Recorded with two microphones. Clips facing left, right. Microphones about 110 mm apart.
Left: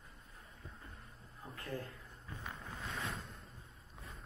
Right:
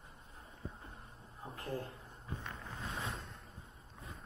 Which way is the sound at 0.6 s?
30° right (ahead or behind).